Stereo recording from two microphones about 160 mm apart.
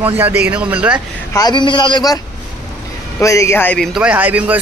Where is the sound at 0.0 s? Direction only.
10° right (ahead or behind).